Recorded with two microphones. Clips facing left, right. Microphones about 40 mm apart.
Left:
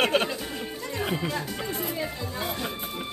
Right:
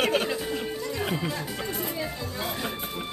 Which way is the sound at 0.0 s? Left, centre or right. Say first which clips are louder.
Left 1 dB; left.